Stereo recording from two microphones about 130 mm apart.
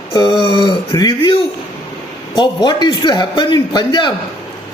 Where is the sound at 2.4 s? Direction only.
30° left (ahead or behind).